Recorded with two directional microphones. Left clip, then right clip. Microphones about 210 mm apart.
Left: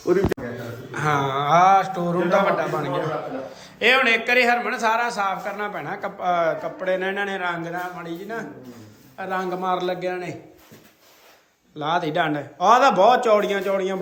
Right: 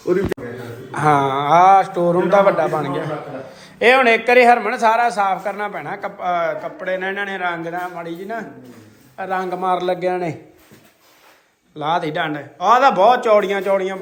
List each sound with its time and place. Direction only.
0.9 s a man's voice: 5° left (ahead or behind)
11.8 s a man's voice: 15° left (ahead or behind)